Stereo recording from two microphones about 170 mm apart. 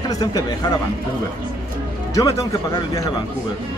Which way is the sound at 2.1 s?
20° left (ahead or behind).